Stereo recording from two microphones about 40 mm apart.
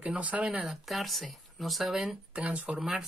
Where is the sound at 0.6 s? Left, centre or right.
Centre.